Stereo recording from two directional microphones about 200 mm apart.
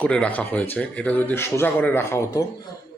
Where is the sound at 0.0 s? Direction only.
5° left (ahead or behind).